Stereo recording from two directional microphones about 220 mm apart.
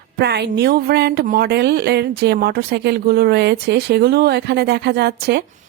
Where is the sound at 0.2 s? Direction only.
50° right (ahead or behind).